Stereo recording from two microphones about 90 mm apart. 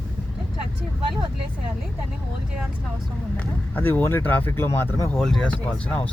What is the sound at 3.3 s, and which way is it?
Speech, 20° left (ahead or behind).